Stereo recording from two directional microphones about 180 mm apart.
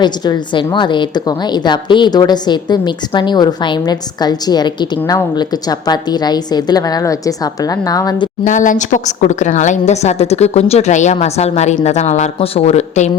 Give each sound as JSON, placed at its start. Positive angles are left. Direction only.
{"t": 0.0, "sound": "a woman's voice", "side_deg": 25}
{"t": 8.4, "sound": "a woman's voice", "side_deg": 45}